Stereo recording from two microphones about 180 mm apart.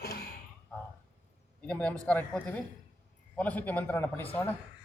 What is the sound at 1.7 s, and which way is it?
A man's voice, 5° left (ahead or behind).